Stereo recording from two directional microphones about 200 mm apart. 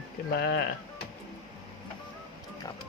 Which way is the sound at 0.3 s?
50° left (ahead or behind).